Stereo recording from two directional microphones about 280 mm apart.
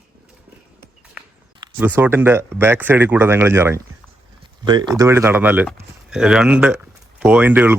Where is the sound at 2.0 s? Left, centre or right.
Centre.